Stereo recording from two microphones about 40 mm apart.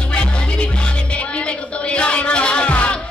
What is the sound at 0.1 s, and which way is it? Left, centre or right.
Music, left.